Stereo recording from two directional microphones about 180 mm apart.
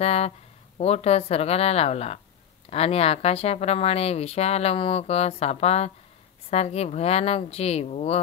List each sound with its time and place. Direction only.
0.0 s speech: 35° left (ahead or behind)